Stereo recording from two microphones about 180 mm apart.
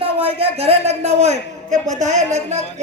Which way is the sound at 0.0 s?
30° right (ahead or behind).